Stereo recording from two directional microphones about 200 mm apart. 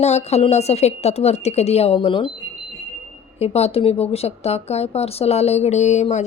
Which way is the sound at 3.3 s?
30° left (ahead or behind).